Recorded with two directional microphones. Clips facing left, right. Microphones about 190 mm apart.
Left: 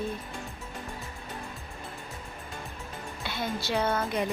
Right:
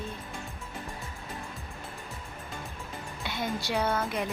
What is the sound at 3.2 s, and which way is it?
Speech, 15° right (ahead or behind).